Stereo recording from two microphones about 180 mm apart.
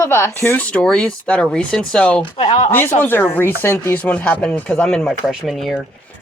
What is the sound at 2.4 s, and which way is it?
Speech, 30° left (ahead or behind).